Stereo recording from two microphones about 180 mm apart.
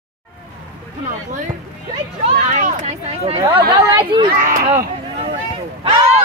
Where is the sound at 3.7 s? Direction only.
25° right (ahead or behind).